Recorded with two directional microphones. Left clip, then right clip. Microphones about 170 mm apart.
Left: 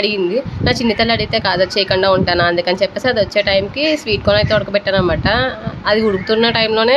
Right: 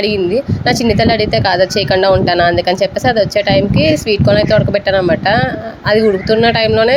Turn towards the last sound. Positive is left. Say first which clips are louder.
# right 3 dB
turn(degrees=-15)  # may be behind; listen again after turning